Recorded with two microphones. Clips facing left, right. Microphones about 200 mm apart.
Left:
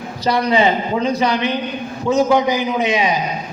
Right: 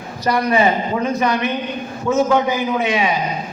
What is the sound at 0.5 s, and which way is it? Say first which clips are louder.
Speech: left 1 dB; 25° left (ahead or behind).